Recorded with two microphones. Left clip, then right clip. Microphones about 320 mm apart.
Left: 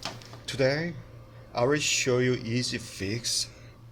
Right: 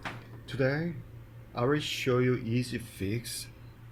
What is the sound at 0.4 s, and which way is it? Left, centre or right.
Speech, left.